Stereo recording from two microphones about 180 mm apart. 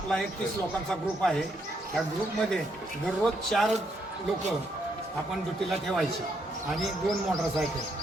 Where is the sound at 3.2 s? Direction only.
Centre (ahead or behind).